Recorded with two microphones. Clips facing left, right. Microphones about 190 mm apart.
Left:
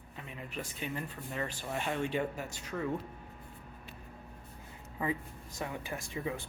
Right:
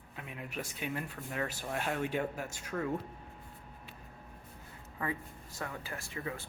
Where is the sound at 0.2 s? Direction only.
5° right (ahead or behind).